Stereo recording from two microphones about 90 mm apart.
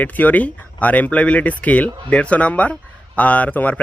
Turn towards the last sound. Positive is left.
turn(degrees=15)  # may be behind; listen again after turning